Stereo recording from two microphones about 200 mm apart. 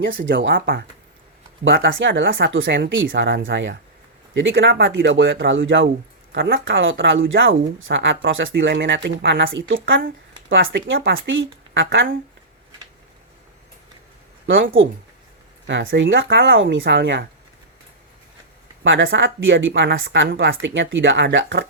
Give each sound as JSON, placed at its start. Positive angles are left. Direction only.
{"t": 0.0, "sound": "speech", "side_deg": -70}
{"t": 1.6, "sound": "speech", "side_deg": -70}
{"t": 14.4, "sound": "speech", "side_deg": -70}
{"t": 18.8, "sound": "speech", "side_deg": -70}